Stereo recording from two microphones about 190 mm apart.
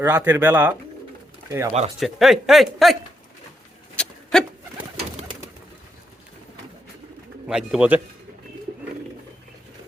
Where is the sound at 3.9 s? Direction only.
5° left (ahead or behind).